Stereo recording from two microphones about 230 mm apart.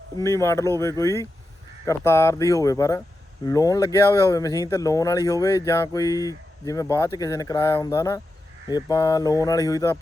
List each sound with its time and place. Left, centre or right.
0.2 s speech: centre